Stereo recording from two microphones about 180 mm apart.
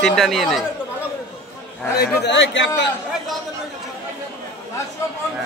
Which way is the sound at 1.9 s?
65° left (ahead or behind).